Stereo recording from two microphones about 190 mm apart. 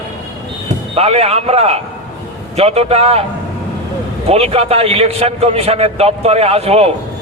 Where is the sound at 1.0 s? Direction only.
35° right (ahead or behind).